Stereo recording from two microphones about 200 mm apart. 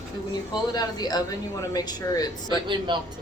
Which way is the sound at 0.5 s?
20° left (ahead or behind).